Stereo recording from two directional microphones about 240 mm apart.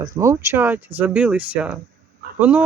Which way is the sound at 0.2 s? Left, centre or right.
Centre.